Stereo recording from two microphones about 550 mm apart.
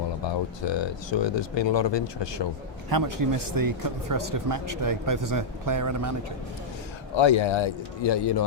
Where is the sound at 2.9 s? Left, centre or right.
Right.